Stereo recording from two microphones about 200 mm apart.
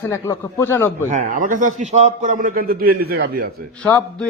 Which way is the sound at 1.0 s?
40° right (ahead or behind).